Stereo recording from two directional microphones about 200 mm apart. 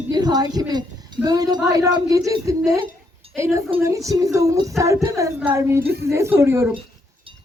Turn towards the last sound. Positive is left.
turn(degrees=-15)  # may be behind; listen again after turning